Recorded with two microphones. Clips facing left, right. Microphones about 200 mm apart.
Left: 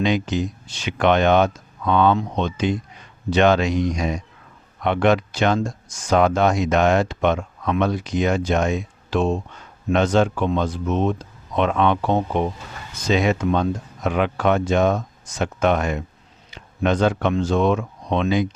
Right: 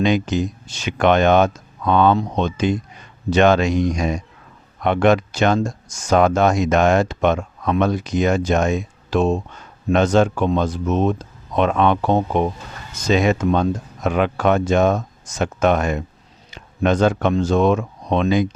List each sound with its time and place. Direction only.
0.0 s speech: 45° right (ahead or behind)